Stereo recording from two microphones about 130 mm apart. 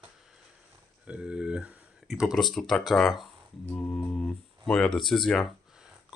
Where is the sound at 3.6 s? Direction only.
10° left (ahead or behind).